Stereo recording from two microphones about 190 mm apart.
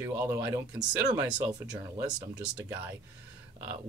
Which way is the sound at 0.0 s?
15° right (ahead or behind).